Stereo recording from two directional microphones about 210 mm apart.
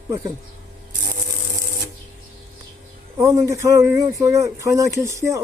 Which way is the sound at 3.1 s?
15° right (ahead or behind).